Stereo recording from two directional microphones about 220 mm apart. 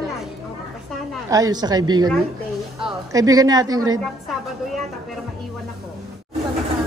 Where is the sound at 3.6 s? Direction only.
70° right (ahead or behind).